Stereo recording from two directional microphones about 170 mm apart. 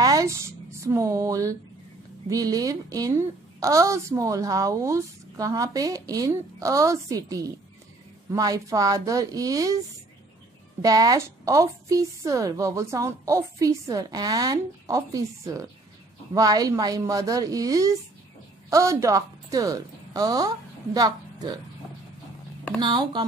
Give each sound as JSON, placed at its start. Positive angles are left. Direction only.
{"t": 0.0, "sound": "a woman's voice", "side_deg": -20}
{"t": 10.8, "sound": "a woman's voice", "side_deg": -20}
{"t": 22.8, "sound": "a woman's voice", "side_deg": -25}